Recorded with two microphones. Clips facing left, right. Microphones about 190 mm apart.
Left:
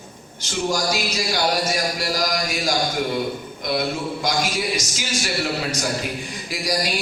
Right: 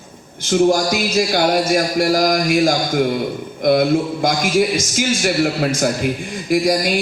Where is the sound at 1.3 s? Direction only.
55° right (ahead or behind).